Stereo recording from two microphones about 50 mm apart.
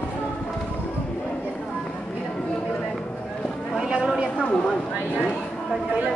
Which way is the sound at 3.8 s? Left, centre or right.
Centre.